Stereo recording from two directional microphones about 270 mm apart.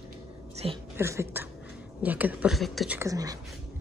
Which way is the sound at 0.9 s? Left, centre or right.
Centre.